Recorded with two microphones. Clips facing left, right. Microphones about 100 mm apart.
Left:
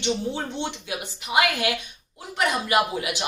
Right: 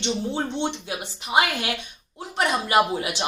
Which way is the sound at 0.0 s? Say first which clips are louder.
Even; 25° right (ahead or behind).